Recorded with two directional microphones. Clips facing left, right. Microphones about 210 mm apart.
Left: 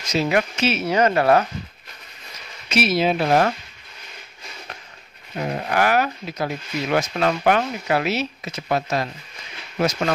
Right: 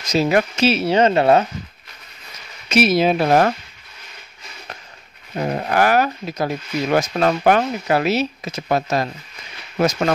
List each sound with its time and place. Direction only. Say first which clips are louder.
0.1 s speech: right 3 dB; 35° right (ahead or behind)
2.7 s speech: right 4 dB; 45° right (ahead or behind)
5.3 s speech: right 3 dB; 40° right (ahead or behind)